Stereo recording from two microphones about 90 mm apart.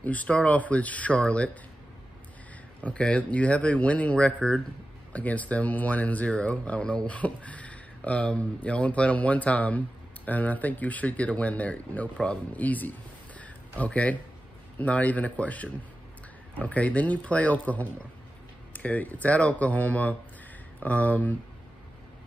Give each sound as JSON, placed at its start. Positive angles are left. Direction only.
{"t": 0.0, "sound": "speech", "side_deg": 15}
{"t": 2.8, "sound": "speech", "side_deg": 15}
{"t": 13.4, "sound": "a sound", "side_deg": 15}
{"t": 14.8, "sound": "speech", "side_deg": 15}